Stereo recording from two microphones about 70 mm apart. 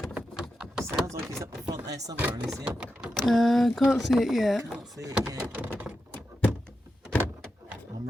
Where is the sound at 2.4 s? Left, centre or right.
Centre.